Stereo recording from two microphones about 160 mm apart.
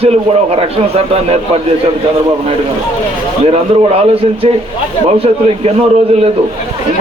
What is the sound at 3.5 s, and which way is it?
A man's voice, 35° right (ahead or behind).